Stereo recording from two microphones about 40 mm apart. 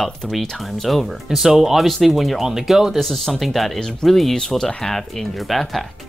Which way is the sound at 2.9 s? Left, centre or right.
Centre.